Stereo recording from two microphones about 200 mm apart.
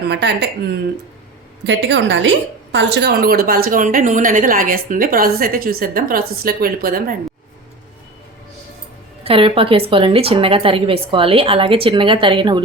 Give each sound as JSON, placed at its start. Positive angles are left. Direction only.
{"t": 0.1, "sound": "a woman's voice", "side_deg": -60}
{"t": 2.7, "sound": "a woman's voice", "side_deg": -60}
{"t": 9.2, "sound": "a woman's voice", "side_deg": -25}